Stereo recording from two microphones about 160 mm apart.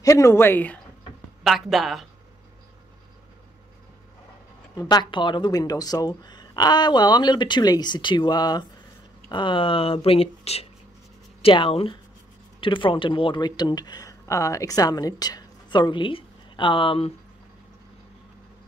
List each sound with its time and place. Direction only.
0.0 s speech: 20° left (ahead or behind)
1.4 s speech: centre (ahead or behind)
4.7 s speech: 25° left (ahead or behind)